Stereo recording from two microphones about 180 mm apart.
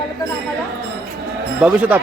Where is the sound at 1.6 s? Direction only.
10° right (ahead or behind).